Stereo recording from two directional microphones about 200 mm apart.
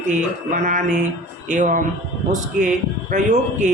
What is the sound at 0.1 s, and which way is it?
A man's voice, 40° right (ahead or behind).